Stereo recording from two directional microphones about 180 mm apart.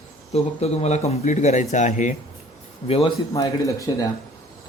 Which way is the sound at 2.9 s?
30° left (ahead or behind).